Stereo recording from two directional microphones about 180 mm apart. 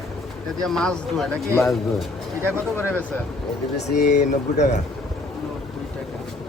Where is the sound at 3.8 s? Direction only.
70° left (ahead or behind).